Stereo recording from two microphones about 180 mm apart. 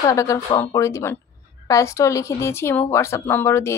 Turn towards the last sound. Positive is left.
turn(degrees=15)  # may be behind; listen again after turning